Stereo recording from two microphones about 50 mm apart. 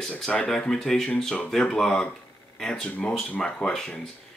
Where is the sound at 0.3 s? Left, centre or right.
Centre.